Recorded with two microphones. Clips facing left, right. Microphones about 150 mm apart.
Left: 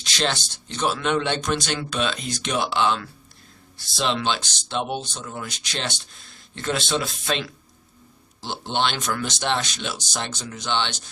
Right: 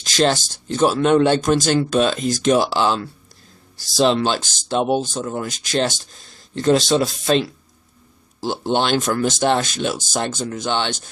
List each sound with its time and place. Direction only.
0.0 s speech: 45° right (ahead or behind)